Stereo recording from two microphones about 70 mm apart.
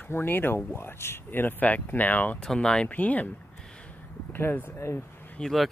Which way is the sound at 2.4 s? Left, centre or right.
Centre.